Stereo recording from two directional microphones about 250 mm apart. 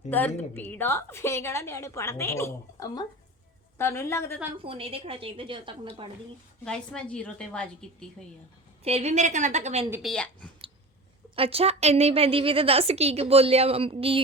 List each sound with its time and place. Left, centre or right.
0.1 s a woman's voice: centre
4.5 s a woman's voice: right
6.7 s a woman's voice: centre
8.8 s a woman's voice: right
9.9 s a woman's voice: centre
11.3 s a woman's voice: right